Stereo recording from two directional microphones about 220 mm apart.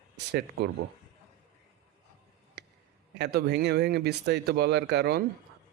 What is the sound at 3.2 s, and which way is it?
Speech, 50° right (ahead or behind).